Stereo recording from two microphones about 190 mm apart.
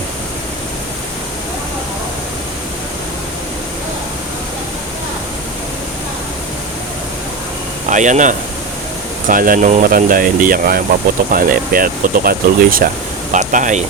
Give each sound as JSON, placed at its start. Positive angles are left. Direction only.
{"t": 7.9, "sound": "speech", "side_deg": -40}